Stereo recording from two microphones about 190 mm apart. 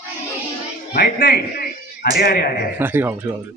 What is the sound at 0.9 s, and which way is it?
A man's voice, 55° left (ahead or behind).